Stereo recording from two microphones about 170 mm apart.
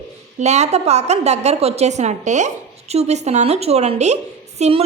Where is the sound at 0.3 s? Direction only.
40° right (ahead or behind).